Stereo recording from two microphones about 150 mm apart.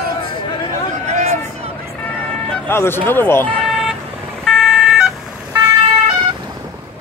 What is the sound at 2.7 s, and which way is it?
Speech, 15° left (ahead or behind).